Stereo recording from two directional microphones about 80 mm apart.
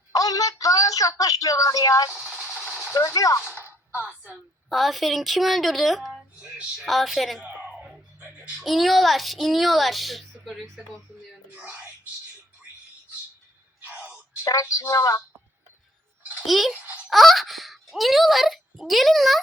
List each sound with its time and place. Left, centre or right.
0.1 s a sound: left
2.1 s engine: centre
2.9 s speech: left
3.6 s a sound: right
4.7 s a child's voice: centre
6.4 s speech: centre
6.8 s a child's voice: centre
7.8 s music: centre
8.6 s a child's voice: centre
11.5 s speech: right
13.8 s a sound: centre
14.4 s speech: left
16.5 s a child's voice: centre